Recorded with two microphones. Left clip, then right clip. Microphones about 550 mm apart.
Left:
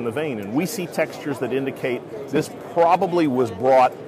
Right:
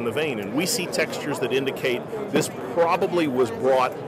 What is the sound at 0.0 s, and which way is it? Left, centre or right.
A man's voice, left.